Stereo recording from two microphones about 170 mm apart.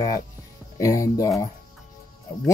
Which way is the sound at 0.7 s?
20° left (ahead or behind).